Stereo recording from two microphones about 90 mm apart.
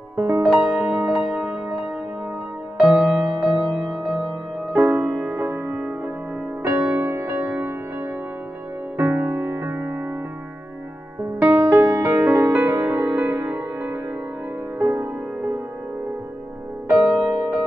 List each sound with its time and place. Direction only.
0.2 s music: 20° right (ahead or behind)
8.9 s music: 20° right (ahead or behind)
11.4 s music: 25° right (ahead or behind)
16.9 s music: 20° right (ahead or behind)